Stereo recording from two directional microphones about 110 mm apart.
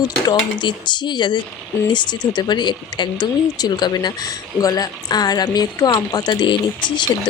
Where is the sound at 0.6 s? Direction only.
45° left (ahead or behind).